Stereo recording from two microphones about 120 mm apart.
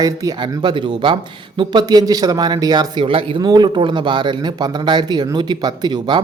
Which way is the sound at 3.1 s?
50° right (ahead or behind).